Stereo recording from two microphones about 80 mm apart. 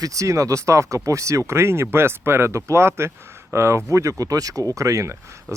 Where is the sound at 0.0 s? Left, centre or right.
Right.